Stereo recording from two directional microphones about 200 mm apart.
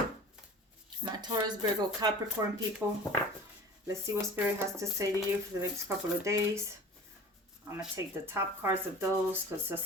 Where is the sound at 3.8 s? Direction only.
15° right (ahead or behind).